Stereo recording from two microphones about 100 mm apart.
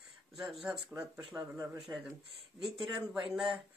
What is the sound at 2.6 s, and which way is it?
Speech, 55° right (ahead or behind).